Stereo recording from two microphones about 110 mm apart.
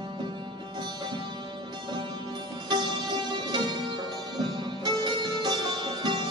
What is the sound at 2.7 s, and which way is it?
Music, 45° right (ahead or behind).